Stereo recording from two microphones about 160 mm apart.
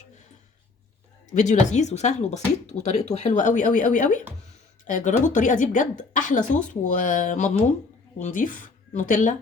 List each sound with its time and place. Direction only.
1.3 s speech: 50° left (ahead or behind)